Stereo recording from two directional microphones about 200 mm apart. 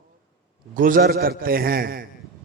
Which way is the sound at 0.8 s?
45° right (ahead or behind).